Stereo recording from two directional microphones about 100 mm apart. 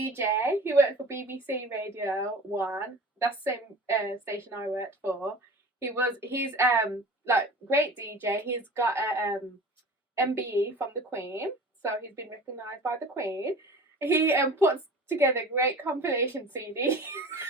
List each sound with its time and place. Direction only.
0.2 s a woman's voice: 20° right (ahead or behind)